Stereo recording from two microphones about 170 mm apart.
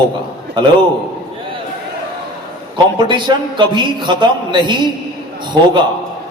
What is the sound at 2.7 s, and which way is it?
A man's voice, 25° right (ahead or behind).